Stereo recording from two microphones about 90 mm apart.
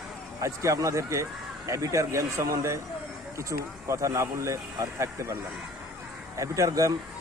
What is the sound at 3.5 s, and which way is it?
Speech, 45° right (ahead or behind).